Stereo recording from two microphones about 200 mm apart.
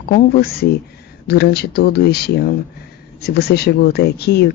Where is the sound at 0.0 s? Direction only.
50° left (ahead or behind).